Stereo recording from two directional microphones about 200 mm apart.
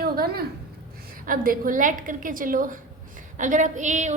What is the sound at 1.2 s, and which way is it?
A woman's voice, 45° right (ahead or behind).